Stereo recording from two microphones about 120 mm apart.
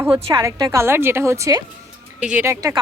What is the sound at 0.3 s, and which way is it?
A woman's voice, 25° right (ahead or behind).